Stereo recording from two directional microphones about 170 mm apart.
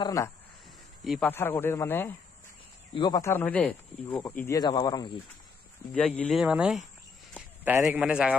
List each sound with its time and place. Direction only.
0.0 s speech: 20° left (ahead or behind)
2.9 s speech: 30° left (ahead or behind)
3.2 s speech: 15° left (ahead or behind)
4.2 s speech: 20° left (ahead or behind)
5.9 s a man's voice: 5° left (ahead or behind)